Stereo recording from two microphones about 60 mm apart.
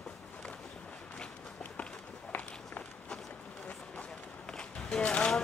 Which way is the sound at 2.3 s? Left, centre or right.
Left.